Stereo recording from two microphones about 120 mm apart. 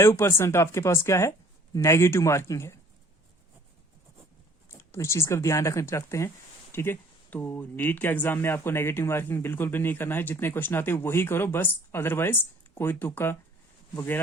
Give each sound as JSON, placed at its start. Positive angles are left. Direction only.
{"t": 0.0, "sound": "speech", "side_deg": 20}
{"t": 4.7, "sound": "speech", "side_deg": 20}